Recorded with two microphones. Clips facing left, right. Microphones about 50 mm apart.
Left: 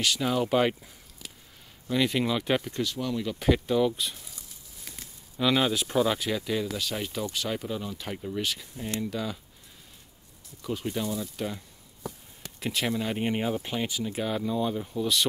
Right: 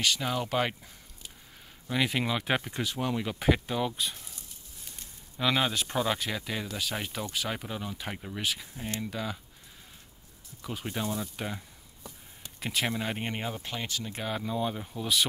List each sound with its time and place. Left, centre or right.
0.0 s speech: centre
1.2 s a sound: left
1.9 s speech: centre; by 3.3 s right
3.3 s speech: centre
5.4 s speech: centre
10.6 s speech: centre
12.5 s speech: centre
13.2 s speech: centre